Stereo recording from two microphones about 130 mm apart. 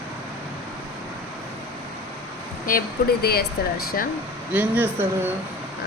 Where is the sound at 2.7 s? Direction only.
90° left.